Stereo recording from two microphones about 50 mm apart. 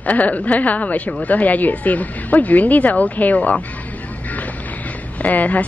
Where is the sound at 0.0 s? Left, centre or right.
Left.